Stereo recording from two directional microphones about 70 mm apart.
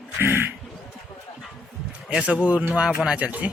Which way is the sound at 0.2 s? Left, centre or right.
Right.